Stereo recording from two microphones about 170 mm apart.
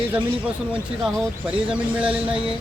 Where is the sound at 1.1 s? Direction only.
5° right (ahead or behind).